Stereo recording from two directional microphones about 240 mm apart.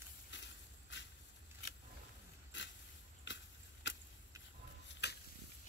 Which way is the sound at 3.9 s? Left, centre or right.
Left.